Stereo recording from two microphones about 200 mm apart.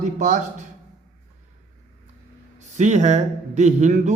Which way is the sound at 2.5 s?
35° right (ahead or behind).